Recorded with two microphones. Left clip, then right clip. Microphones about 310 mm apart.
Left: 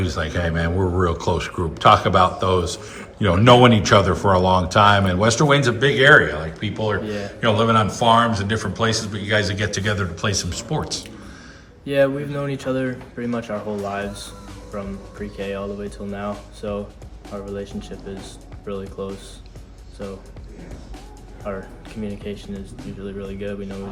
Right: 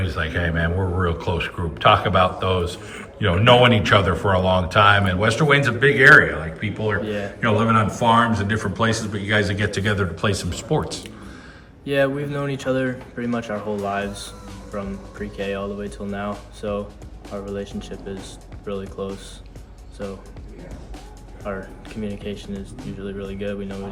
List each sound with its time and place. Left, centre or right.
0.0 s speech: centre
21.4 s speech: centre